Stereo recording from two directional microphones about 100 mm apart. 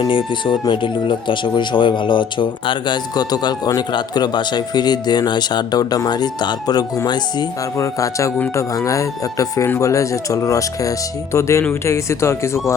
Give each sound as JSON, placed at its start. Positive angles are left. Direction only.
{"t": 0.1, "sound": "speech", "side_deg": 55}
{"t": 9.6, "sound": "speech", "side_deg": 20}
{"t": 9.9, "sound": "speech", "side_deg": 30}